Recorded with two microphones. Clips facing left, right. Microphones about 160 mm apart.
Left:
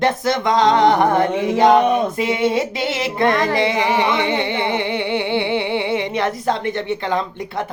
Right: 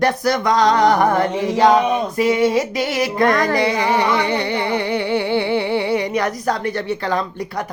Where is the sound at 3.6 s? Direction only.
20° left (ahead or behind).